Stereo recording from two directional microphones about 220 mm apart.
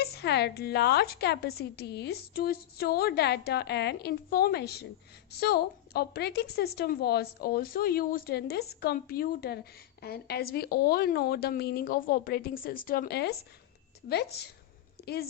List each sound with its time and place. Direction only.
0.0 s a woman's voice: 50° left (ahead or behind)